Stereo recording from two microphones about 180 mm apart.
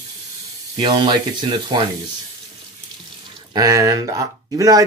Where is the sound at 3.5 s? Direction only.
20° right (ahead or behind).